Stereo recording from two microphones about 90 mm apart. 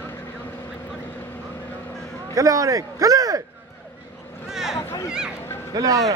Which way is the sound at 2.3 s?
40° right (ahead or behind).